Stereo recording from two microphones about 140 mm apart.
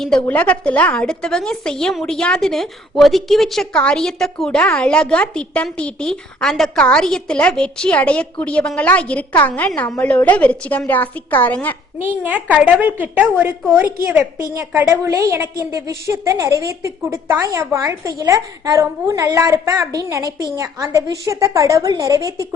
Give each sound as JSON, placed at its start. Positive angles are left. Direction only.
{"t": 0.3, "sound": "a woman's voice", "side_deg": 10}
{"t": 12.2, "sound": "a woman's voice", "side_deg": -10}